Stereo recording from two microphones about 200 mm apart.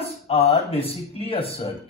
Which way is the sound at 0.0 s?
30° left (ahead or behind).